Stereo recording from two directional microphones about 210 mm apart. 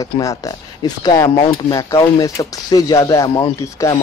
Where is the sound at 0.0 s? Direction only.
15° left (ahead or behind).